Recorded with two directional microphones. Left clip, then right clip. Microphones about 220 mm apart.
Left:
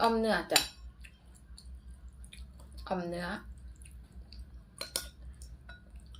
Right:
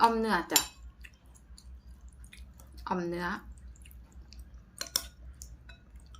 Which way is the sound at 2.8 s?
20° right (ahead or behind).